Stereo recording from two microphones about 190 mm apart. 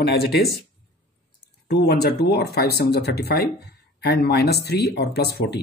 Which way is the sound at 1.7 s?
60° left (ahead or behind).